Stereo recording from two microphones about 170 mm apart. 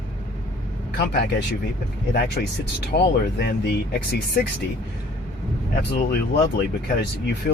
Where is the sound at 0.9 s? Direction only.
80° left.